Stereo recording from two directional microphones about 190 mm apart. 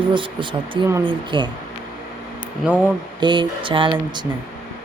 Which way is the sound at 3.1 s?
25° right (ahead or behind).